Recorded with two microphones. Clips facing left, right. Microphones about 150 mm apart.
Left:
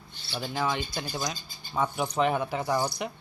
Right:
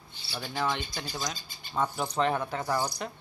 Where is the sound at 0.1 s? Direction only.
10° right (ahead or behind).